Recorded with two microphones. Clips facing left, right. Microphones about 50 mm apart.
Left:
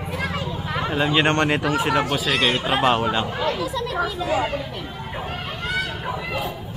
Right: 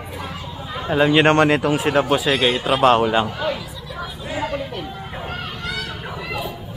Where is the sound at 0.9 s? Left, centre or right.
Centre.